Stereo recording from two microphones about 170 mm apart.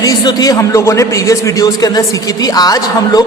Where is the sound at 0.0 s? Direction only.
20° left (ahead or behind).